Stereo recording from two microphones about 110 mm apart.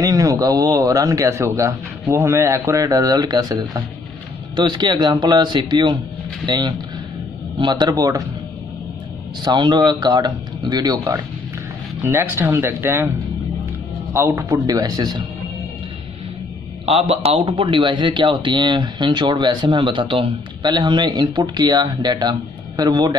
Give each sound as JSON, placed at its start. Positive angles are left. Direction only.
{"t": 0.0, "sound": "a man's voice", "side_deg": -30}
{"t": 9.4, "sound": "a man's voice", "side_deg": -40}
{"t": 12.0, "sound": "speech", "side_deg": -20}
{"t": 14.1, "sound": "a man's voice", "side_deg": -25}
{"t": 16.8, "sound": "a man's voice", "side_deg": -60}
{"t": 17.5, "sound": "speech", "side_deg": -50}